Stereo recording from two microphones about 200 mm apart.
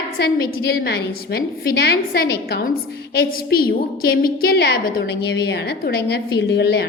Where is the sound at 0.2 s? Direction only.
55° left (ahead or behind).